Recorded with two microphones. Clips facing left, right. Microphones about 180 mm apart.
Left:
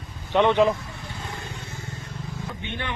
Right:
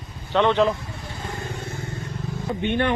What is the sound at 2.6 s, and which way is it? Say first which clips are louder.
Speech: right 14 dB; 55° right (ahead or behind).